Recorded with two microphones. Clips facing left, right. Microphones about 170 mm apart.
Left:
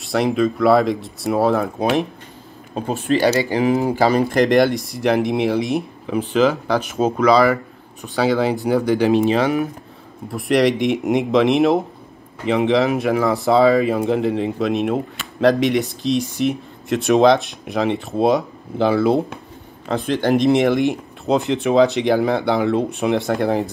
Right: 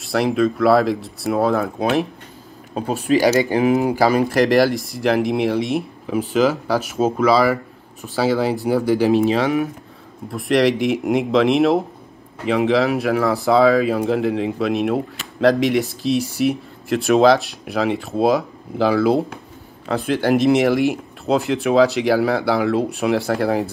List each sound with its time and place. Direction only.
0.0 s speech: centre (ahead or behind)
3.1 s speech: 10° right (ahead or behind)